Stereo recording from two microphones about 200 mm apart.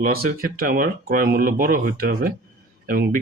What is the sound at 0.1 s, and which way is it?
A man's voice, 50° right (ahead or behind).